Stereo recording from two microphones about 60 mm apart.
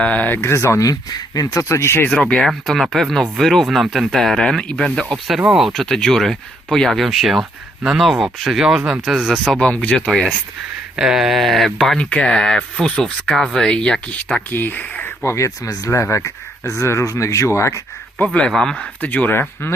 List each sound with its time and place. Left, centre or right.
0.0 s speech: left
0.4 s speech: left
1.4 s speech: left
1.6 s speech: left
2.0 s speech: centre
2.6 s speech: centre
9.5 s speech: centre
10.9 s speech: centre
11.9 s speech: centre
14.5 s speech: left
15.0 s speech: left
15.9 s speech: left
18.3 s speech: centre
18.8 s speech: left